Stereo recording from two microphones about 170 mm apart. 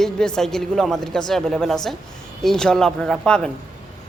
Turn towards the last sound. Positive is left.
turn(degrees=5)  # may be behind; listen again after turning